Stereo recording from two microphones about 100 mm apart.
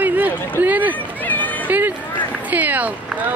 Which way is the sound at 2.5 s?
15° right (ahead or behind).